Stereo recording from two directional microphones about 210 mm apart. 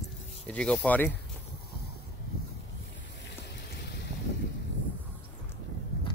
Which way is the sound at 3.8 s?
50° left (ahead or behind).